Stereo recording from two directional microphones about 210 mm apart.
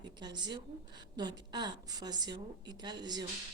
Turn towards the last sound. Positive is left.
turn(degrees=-20)  # may be behind; listen again after turning